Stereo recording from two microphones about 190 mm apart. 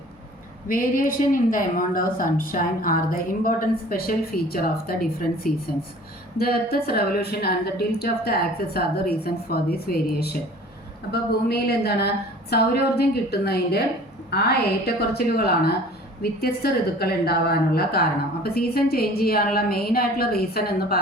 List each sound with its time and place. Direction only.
0.7 s a woman's voice: 45° left (ahead or behind)
6.3 s a woman's voice: 55° left (ahead or behind)